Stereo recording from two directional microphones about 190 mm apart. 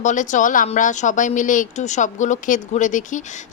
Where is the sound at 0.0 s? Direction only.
40° left (ahead or behind).